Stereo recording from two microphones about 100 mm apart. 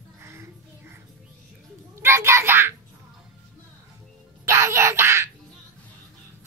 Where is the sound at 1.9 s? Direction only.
25° right (ahead or behind).